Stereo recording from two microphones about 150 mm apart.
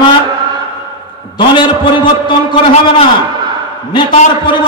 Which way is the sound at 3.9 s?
30° left (ahead or behind).